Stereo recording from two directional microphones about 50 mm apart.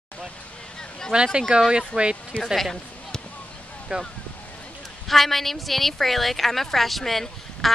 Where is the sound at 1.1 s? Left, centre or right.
Centre.